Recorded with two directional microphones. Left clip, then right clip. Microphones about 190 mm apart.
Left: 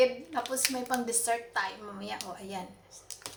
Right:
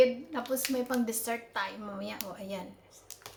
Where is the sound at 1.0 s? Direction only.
35° right (ahead or behind).